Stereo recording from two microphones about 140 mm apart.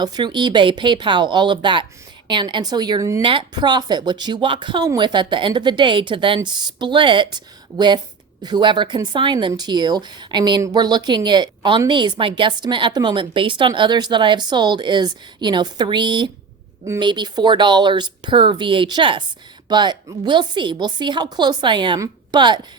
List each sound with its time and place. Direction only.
0.0 s a woman's voice: 30° right (ahead or behind)